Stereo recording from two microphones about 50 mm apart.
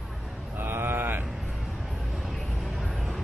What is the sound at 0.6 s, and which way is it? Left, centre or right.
Mantra, right.